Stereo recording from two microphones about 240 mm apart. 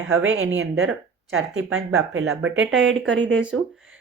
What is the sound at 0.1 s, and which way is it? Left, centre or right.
Speech, right.